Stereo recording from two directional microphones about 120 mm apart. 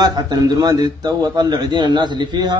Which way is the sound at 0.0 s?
35° right (ahead or behind).